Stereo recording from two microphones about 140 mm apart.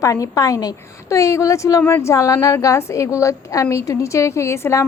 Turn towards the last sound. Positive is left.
turn(degrees=20)  # may be behind; listen again after turning